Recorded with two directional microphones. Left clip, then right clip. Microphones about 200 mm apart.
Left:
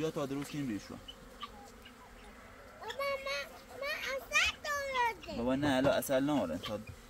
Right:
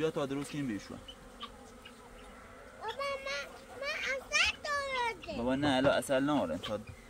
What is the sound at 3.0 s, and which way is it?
Children playing, 30° left (ahead or behind).